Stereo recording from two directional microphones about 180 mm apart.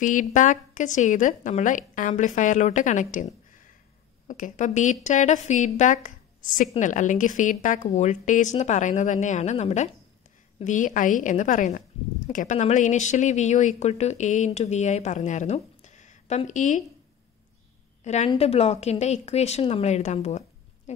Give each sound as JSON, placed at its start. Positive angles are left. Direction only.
{"t": 0.0, "sound": "a woman's voice", "side_deg": 45}
{"t": 18.0, "sound": "speech", "side_deg": 40}